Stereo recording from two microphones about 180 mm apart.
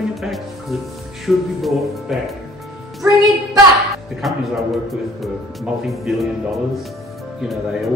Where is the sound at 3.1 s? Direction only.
Centre (ahead or behind).